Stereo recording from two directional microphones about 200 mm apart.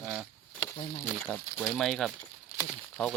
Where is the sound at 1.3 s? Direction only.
Centre (ahead or behind).